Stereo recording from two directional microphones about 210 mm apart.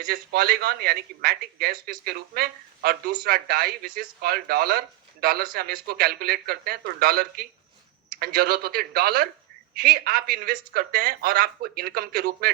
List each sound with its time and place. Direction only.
0.0 s a man's voice: 45° right (ahead or behind)